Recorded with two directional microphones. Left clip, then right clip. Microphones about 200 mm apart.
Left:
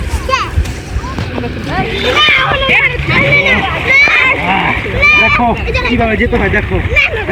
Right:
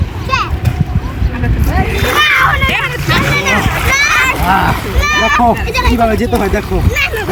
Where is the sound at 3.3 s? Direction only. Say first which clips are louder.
Left 6 dB; 55° right (ahead or behind).